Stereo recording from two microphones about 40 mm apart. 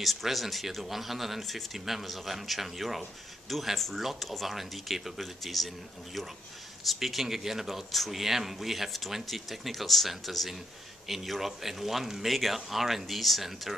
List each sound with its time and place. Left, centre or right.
0.0 s a man's voice: centre
6.9 s a man's voice: centre